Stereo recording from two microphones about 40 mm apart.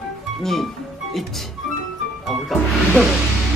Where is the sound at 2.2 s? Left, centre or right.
Centre.